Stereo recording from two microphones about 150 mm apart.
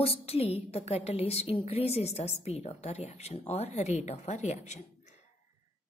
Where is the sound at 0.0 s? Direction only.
40° left (ahead or behind).